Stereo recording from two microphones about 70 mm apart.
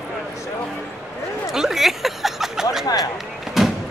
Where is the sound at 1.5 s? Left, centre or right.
Centre.